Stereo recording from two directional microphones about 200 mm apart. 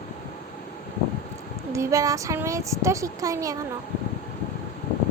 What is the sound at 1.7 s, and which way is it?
Speech, 15° right (ahead or behind).